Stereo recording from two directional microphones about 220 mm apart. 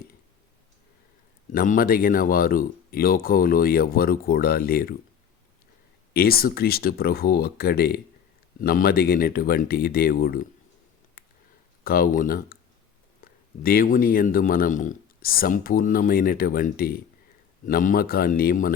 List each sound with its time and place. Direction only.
1.5 s a man's voice: 40° left (ahead or behind)
6.1 s speech: 45° left (ahead or behind)
11.2 s a sound: 40° left (ahead or behind)
11.8 s a man's voice: 40° left (ahead or behind)